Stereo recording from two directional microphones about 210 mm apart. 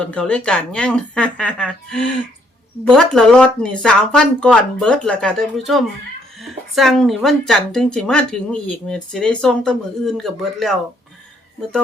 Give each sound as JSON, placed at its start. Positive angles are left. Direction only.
{"t": 0.0, "sound": "speech", "side_deg": 5}